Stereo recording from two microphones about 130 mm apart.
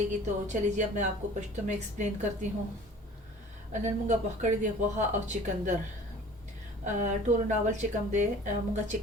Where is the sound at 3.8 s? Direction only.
70° right (ahead or behind).